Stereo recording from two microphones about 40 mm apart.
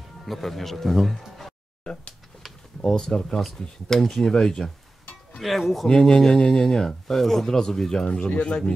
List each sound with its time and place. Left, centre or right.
0.2 s speech: centre
2.8 s speech: centre
5.4 s speech: centre
5.9 s speech: centre
8.3 s speech: left